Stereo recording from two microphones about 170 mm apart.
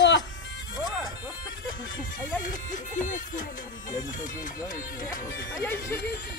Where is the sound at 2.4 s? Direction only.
50° left (ahead or behind).